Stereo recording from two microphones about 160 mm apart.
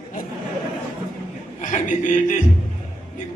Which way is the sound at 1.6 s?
50° left (ahead or behind).